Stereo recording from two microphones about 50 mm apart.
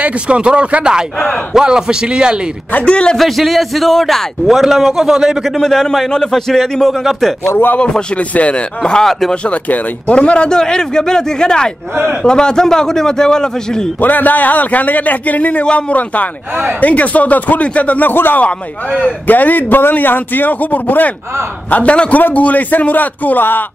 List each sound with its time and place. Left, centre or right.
0.0 s speech: right
1.5 s a man's voice: centre
2.8 s speech: left
3.2 s a man's voice: centre
5.6 s a man's voice: centre
7.8 s speech: left
9.3 s a man's voice: left
14.0 s a man's voice: left
18.1 s a man's voice: left